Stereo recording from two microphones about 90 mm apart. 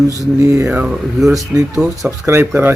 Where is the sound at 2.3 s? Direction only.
25° right (ahead or behind).